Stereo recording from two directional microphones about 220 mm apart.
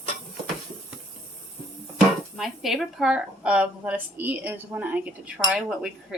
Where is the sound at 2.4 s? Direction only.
Centre (ahead or behind).